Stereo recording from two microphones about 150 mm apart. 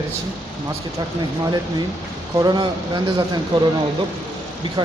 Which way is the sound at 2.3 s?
25° right (ahead or behind).